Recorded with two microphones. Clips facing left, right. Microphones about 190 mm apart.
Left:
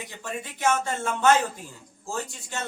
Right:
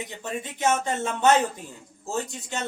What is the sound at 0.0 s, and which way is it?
Speech, 20° right (ahead or behind).